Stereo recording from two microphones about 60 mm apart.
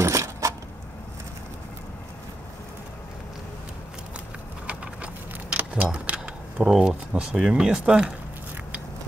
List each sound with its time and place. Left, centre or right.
0.0 s keys jangling: right
4.6 s keys jangling: right
6.7 s speech: centre